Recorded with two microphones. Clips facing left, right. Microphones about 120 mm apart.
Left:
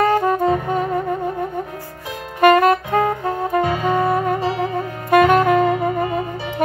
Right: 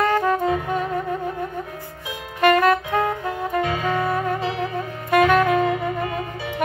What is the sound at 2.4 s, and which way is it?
Saxophone, 35° left (ahead or behind).